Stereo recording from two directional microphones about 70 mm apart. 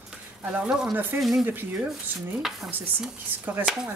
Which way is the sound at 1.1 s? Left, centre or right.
Centre.